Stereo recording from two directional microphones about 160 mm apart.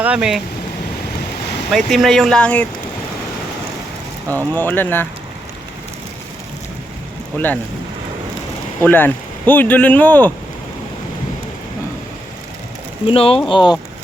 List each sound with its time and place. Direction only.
0.0 s speech: 5° right (ahead or behind)
1.7 s speech: centre (ahead or behind)
4.5 s speech: 10° left (ahead or behind)
7.3 s speech: 10° left (ahead or behind)
8.8 s speech: 10° left (ahead or behind)
13.1 s speech: 35° left (ahead or behind)